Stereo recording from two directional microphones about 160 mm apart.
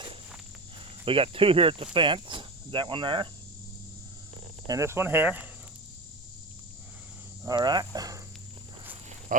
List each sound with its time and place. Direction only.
1.0 s speech: 35° right (ahead or behind)
4.6 s speech: 20° right (ahead or behind)
7.4 s speech: 25° right (ahead or behind)